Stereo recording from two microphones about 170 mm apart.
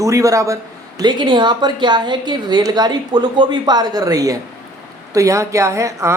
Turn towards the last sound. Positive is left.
turn(degrees=-20)  # may be behind; listen again after turning